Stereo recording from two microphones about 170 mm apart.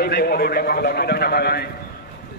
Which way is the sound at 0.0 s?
65° left (ahead or behind).